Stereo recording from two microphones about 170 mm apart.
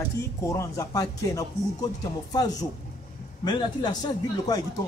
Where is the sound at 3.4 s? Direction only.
25° left (ahead or behind).